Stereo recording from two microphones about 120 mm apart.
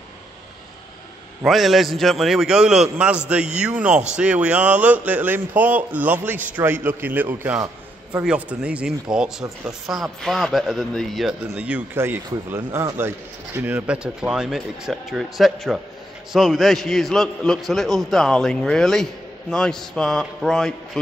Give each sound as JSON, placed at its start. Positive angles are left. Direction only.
{"t": 1.4, "sound": "a man's voice", "side_deg": 0}